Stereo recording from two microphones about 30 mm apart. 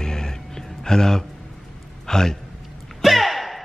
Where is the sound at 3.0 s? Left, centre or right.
Centre.